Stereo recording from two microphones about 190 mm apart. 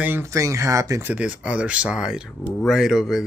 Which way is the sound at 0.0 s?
10° right (ahead or behind).